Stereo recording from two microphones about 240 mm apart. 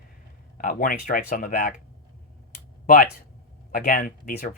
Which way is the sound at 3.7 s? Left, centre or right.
Left.